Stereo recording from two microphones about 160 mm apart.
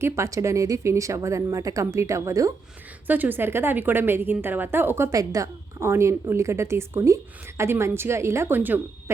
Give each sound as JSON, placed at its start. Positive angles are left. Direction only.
{"t": 0.0, "sound": "a woman's voice", "side_deg": -20}